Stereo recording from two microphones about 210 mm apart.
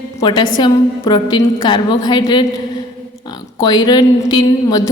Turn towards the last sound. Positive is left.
turn(degrees=20)  # may be behind; listen again after turning